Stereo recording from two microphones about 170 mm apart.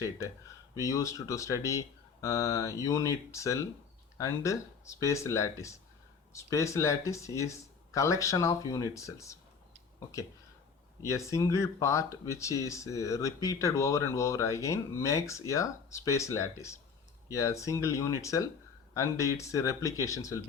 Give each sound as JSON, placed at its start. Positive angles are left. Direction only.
{"t": 0.8, "sound": "speech", "side_deg": 20}
{"t": 11.1, "sound": "speech", "side_deg": 15}